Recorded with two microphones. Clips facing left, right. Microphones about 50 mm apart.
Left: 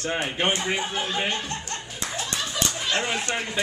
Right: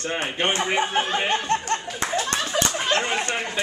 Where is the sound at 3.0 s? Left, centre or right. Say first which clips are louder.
Right 3 dB; right.